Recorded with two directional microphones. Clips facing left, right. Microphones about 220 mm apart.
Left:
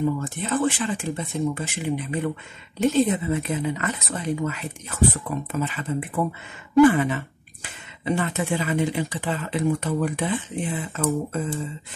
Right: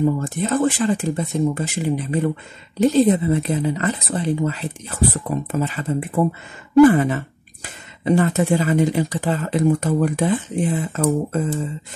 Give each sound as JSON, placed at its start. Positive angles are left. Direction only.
{"t": 0.0, "sound": "speech", "side_deg": -40}